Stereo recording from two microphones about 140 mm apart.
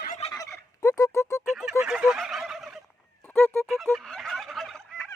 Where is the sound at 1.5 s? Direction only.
Centre (ahead or behind).